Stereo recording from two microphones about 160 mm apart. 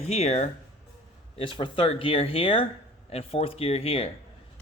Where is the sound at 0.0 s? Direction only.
40° left (ahead or behind).